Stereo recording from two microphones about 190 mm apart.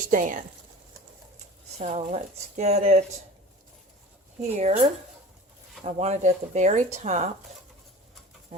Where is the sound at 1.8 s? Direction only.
40° right (ahead or behind).